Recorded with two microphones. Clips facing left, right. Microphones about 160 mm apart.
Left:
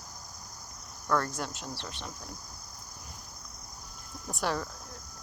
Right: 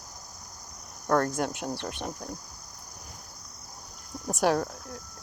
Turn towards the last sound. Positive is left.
turn(degrees=-50)  # may be behind; listen again after turning